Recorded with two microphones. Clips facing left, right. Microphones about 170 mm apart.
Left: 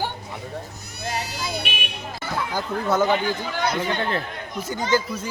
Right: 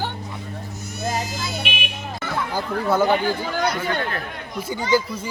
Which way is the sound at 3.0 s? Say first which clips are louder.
Right 2 dB; 45° right (ahead or behind).